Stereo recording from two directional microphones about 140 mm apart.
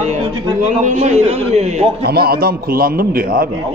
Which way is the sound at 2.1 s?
90° right.